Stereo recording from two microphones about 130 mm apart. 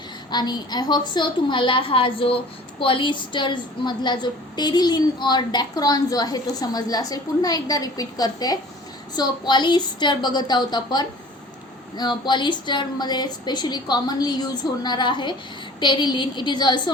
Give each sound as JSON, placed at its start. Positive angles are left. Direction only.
{"t": 0.3, "sound": "a woman's voice", "side_deg": 35}